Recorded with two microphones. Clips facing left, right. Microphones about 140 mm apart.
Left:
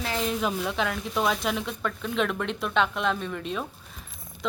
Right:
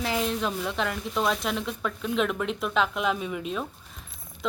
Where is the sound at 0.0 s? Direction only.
10° right (ahead or behind).